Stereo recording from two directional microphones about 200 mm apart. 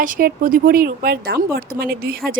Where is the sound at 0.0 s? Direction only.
45° right (ahead or behind).